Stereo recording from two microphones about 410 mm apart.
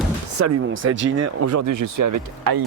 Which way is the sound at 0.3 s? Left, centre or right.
Right.